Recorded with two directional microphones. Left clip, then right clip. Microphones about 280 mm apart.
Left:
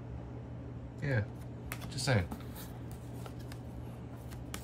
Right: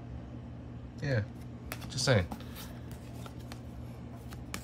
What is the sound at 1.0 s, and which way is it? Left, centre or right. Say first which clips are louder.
Speech: right 2 dB; centre.